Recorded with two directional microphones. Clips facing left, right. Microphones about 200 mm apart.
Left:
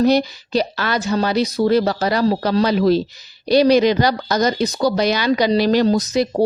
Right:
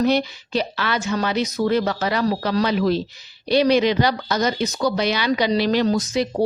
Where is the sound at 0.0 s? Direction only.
40° left (ahead or behind).